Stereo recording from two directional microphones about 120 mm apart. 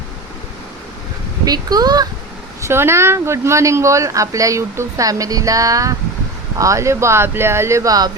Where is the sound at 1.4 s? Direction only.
30° right (ahead or behind).